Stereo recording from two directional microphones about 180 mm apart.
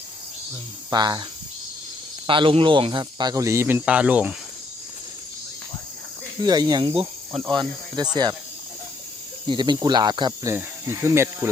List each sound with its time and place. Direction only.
0.9 s speech: 20° right (ahead or behind)
2.2 s speech: 30° right (ahead or behind); by 4.4 s 10° right (ahead or behind)
6.4 s speech: 20° right (ahead or behind)
9.5 s speech: 25° right (ahead or behind)
10.5 s speech: 15° right (ahead or behind)